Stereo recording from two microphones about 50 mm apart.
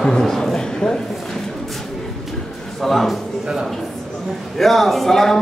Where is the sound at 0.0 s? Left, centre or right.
Centre.